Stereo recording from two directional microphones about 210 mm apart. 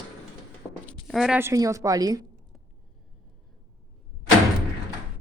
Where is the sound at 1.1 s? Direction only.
Centre (ahead or behind); by 2.3 s 15° right (ahead or behind).